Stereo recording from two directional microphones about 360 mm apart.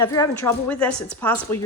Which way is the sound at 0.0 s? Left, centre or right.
Centre.